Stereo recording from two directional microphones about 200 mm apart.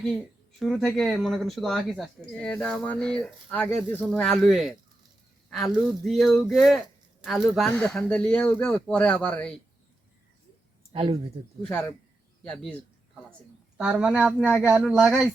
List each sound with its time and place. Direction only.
0.6 s speech: centre (ahead or behind)
6.0 s speech: centre (ahead or behind)
10.9 s speech: 25° right (ahead or behind)
11.6 s speech: 5° left (ahead or behind)